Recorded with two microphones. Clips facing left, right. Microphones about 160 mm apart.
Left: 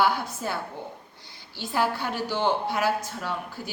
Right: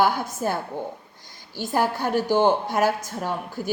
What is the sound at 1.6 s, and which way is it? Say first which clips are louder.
Speech: right 3 dB; 45° right (ahead or behind).